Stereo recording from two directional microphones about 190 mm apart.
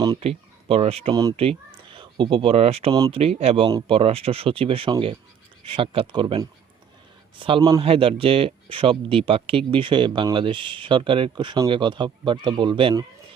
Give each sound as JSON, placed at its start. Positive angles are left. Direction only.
{"t": 0.2, "sound": "speech", "side_deg": -30}